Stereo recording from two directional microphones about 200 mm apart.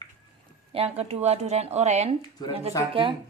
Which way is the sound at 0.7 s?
30° right (ahead or behind).